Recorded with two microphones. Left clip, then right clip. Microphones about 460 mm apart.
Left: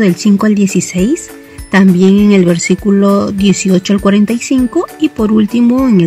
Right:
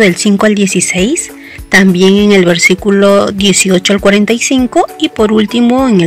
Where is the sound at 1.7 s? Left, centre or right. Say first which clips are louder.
Right 3 dB; right.